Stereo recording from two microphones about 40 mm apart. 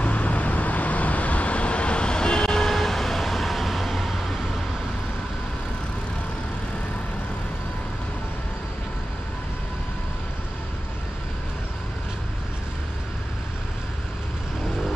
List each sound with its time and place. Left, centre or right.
0.0 s vehicle: left; by 4.3 s centre